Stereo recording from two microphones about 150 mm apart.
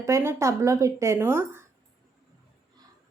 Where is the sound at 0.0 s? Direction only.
20° right (ahead or behind).